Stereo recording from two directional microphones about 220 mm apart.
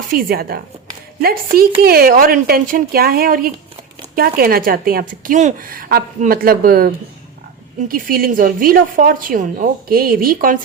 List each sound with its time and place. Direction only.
0.1 s speech: 40° right (ahead or behind)